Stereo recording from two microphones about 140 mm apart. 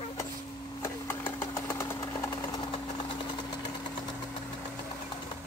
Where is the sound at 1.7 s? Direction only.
20° left (ahead or behind).